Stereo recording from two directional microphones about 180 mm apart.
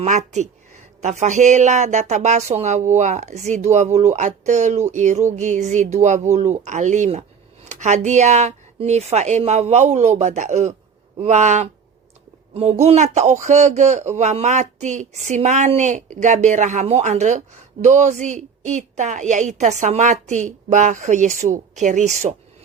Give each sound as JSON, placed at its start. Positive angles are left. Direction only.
{"t": 0.0, "sound": "speech", "side_deg": -40}
{"t": 12.8, "sound": "speech", "side_deg": -40}